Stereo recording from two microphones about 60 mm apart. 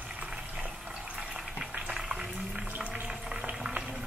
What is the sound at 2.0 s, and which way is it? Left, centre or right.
Boiling, centre.